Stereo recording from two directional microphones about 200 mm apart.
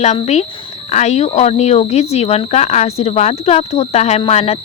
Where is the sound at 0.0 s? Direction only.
35° left (ahead or behind).